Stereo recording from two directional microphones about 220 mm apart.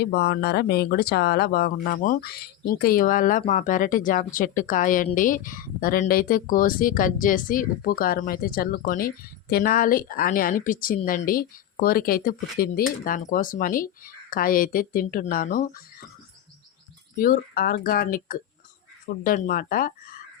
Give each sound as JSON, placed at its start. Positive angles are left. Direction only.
{"t": 0.0, "sound": "a woman's voice", "side_deg": 50}
{"t": 17.2, "sound": "a woman's voice", "side_deg": 40}